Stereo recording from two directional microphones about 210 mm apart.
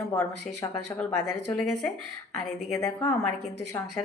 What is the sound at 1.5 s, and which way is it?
A woman's voice, 5° left (ahead or behind).